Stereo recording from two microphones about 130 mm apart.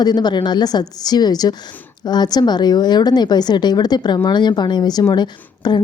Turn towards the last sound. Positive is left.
turn(degrees=35)  # may be behind; listen again after turning